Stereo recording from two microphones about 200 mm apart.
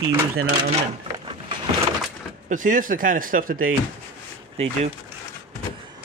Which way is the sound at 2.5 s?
40° right (ahead or behind).